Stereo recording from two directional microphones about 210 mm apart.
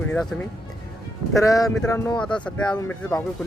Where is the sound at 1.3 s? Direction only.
15° left (ahead or behind).